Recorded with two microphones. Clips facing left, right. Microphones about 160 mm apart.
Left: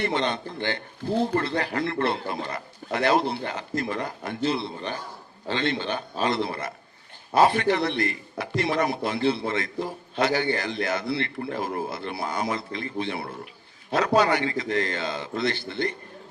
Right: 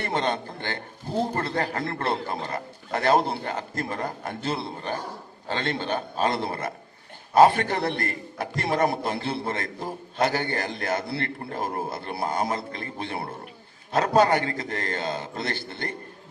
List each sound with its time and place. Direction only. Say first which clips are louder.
0.0 s a man's voice: left 1 dB; 45° right (ahead or behind)